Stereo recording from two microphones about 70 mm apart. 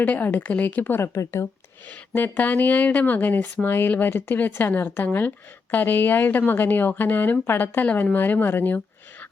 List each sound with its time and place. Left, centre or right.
0.0 s speech: left
2.1 s speech: left